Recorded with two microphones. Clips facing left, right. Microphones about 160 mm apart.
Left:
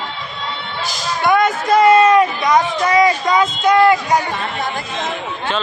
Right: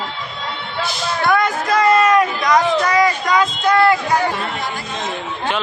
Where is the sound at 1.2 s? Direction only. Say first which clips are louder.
Left 3 dB; 20° left (ahead or behind).